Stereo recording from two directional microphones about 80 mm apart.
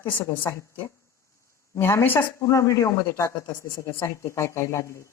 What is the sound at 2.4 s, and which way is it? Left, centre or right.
A woman's voice, left.